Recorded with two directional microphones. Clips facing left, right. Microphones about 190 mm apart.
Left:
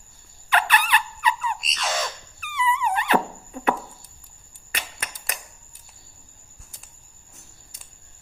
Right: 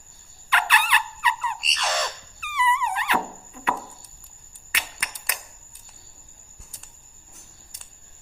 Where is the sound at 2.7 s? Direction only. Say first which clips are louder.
Left 4 dB; 45° left (ahead or behind).